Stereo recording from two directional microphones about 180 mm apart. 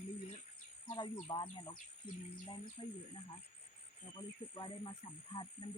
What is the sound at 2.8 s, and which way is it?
Speech, 25° left (ahead or behind).